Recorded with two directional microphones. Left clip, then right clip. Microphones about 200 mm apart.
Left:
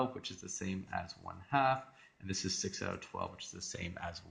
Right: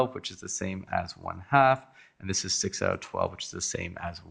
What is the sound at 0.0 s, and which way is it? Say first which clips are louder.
Speech: right 9 dB; 50° right (ahead or behind).